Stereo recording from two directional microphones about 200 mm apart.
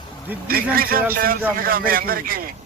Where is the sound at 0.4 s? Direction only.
50° right (ahead or behind).